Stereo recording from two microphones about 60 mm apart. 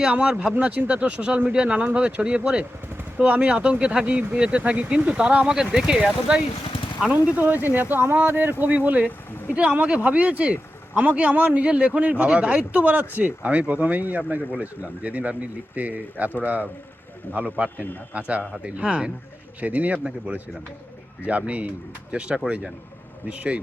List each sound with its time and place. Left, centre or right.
0.0 s speech: centre
7.3 s speech: right
9.0 s speech: left
9.6 s speech: right
21.2 s speech: right